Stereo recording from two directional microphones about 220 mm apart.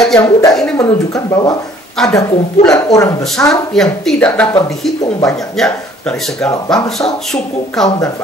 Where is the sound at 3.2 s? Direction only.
Centre (ahead or behind).